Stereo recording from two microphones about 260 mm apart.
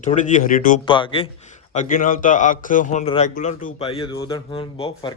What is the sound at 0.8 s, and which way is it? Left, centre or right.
Speech, centre.